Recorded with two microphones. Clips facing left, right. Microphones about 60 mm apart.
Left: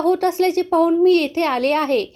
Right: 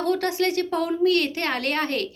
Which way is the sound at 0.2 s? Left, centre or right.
Left.